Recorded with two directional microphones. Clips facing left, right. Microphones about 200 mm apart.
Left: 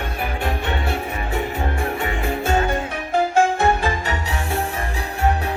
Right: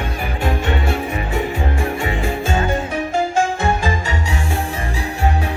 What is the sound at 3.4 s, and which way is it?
Music, 60° left (ahead or behind).